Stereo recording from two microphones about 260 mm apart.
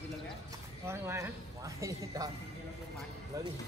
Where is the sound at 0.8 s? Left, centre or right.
Centre.